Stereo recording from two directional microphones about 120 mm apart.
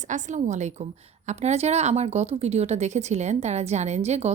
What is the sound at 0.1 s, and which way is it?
Speech, 90° right.